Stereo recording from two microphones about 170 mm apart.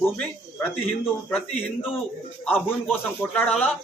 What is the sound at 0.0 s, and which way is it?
Speech, 5° left (ahead or behind).